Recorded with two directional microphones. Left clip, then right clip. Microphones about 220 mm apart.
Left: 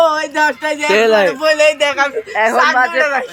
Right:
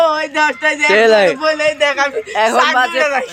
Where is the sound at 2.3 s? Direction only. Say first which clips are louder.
Even; 10° right (ahead or behind).